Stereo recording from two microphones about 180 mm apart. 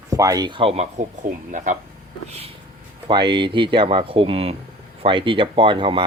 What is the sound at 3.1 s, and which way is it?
Speech, 25° right (ahead or behind).